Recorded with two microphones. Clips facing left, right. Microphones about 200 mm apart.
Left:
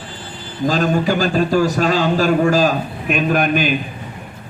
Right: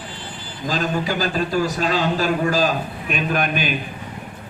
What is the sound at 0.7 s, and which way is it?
A man's voice, 45° left (ahead or behind).